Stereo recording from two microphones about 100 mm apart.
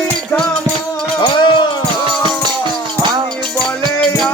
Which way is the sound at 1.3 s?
50° left (ahead or behind).